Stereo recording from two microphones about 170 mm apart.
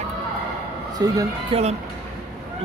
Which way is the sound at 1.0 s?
20° right (ahead or behind).